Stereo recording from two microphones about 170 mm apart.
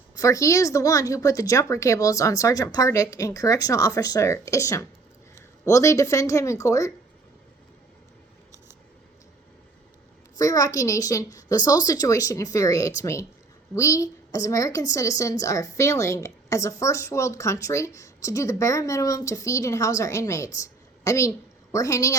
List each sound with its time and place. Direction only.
0.2 s a woman's voice: 20° left (ahead or behind)
10.3 s a woman's voice: 20° left (ahead or behind)